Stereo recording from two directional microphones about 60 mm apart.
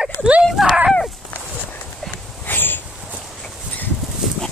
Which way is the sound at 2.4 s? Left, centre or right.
Left.